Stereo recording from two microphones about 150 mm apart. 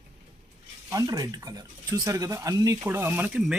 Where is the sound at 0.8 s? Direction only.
25° right (ahead or behind).